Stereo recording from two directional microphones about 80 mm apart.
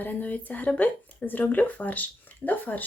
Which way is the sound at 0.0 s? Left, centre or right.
Left.